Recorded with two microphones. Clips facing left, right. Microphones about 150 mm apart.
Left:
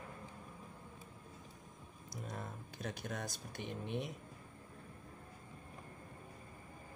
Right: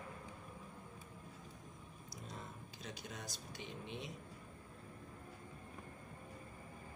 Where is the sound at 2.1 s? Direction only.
55° left (ahead or behind).